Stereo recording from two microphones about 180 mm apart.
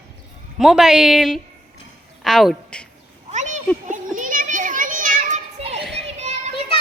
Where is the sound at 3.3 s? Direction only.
40° right (ahead or behind).